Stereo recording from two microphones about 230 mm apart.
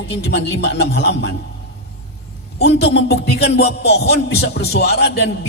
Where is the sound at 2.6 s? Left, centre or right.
Left.